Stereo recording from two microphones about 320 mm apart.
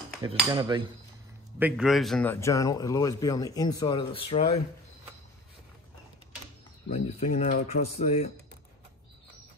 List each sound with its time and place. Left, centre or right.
0.2 s cutlery: centre
1.6 s a man's voice: centre
6.9 s speech: left